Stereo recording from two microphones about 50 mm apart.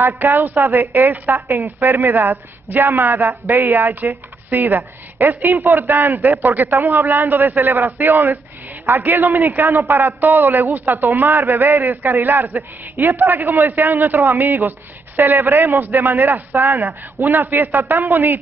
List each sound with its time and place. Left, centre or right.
0.2 s a woman's voice: right
5.5 s a woman's voice: right
5.8 s a man's voice: right
12.2 s a woman's voice: right
12.4 s a man's voice: right
18.0 s a woman's voice: right